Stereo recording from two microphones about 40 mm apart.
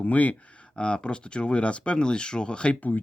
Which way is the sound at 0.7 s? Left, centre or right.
Left.